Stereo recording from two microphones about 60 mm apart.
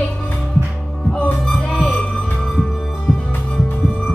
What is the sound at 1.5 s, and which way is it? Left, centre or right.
Music, centre.